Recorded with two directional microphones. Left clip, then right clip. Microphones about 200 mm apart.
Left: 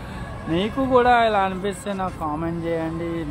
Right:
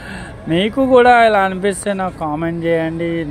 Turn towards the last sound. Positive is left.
turn(degrees=-30)  # may be behind; listen again after turning